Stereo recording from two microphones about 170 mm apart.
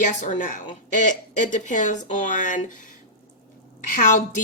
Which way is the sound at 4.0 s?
50° left (ahead or behind).